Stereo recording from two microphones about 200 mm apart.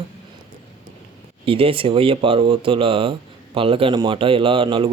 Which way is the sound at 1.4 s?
25° right (ahead or behind).